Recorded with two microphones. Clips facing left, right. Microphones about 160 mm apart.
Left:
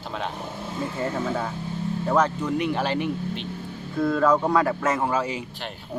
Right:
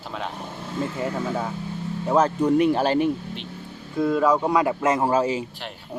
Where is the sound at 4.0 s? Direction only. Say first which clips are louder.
Right 1 dB; 10° right (ahead or behind).